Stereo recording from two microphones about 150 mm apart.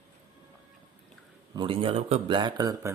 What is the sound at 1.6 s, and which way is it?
Speech, 35° right (ahead or behind).